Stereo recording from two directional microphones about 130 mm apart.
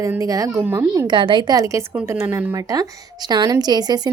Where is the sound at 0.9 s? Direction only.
30° right (ahead or behind).